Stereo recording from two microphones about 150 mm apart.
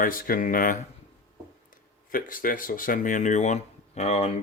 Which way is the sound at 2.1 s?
65° left (ahead or behind).